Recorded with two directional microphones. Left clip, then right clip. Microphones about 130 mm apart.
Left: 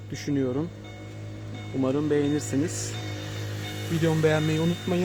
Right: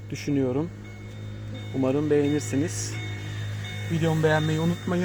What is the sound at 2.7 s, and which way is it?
Speech, 35° left (ahead or behind).